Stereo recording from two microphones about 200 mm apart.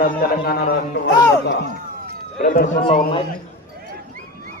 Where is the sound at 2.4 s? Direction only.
40° left (ahead or behind).